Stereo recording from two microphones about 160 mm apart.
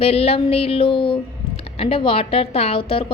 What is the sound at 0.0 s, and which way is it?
A woman's voice, 40° left (ahead or behind).